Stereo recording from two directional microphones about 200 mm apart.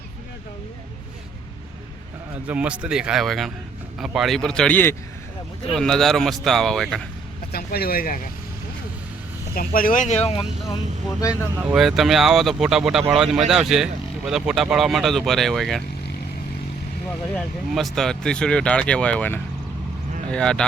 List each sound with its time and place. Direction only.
2.5 s speech: 5° right (ahead or behind)
7.5 s speech: 50° left (ahead or behind)
9.6 s speech: 45° left (ahead or behind)
11.5 s speech: 5° right (ahead or behind)
17.1 s speech: 5° left (ahead or behind)